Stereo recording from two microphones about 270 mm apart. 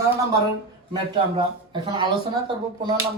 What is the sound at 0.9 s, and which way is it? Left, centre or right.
Speech, centre.